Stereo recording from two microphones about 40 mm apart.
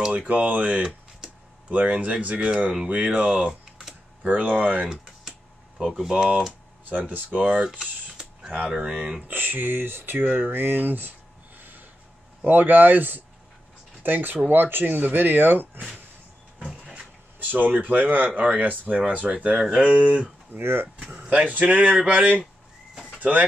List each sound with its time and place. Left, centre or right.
0.3 s speech: right
2.5 s speech: centre
2.9 s speech: right
5.9 s speech: centre
6.9 s speech: right
7.8 s a sound: centre
8.6 s speech: centre
9.3 s speech: right
16.9 s a sound: right
18.4 s speech: right
20.6 s speech: right
21.0 s speech: right